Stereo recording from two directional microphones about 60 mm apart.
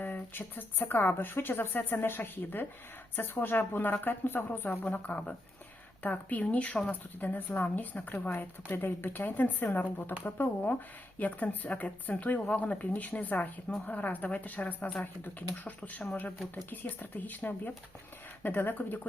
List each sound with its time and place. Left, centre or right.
0.0 s speech: left